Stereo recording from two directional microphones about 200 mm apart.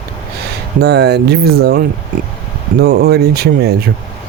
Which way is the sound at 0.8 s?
55° right (ahead or behind).